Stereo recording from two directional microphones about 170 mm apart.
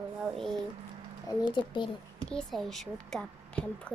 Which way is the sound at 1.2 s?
25° left (ahead or behind).